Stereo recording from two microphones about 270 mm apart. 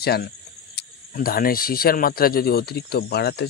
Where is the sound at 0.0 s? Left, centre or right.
Left.